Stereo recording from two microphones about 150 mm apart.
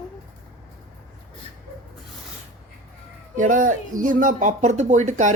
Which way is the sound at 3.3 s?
60° right (ahead or behind).